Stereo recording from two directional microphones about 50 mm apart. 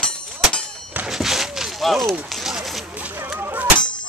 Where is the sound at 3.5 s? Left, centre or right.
Right.